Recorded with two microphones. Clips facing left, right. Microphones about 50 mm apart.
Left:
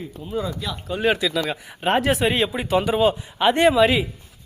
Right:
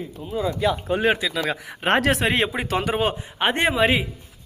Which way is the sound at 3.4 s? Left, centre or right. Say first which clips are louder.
Left 4 dB; right.